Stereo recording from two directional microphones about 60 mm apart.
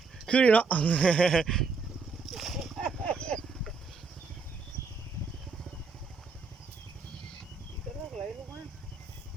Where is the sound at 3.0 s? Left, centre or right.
Centre.